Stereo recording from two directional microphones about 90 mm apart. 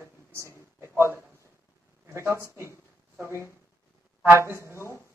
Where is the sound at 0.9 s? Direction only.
30° right (ahead or behind).